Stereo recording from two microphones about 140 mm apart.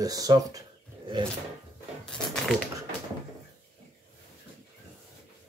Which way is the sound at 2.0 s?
5° left (ahead or behind).